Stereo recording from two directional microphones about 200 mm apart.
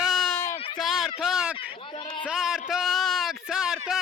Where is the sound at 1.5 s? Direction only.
25° left (ahead or behind).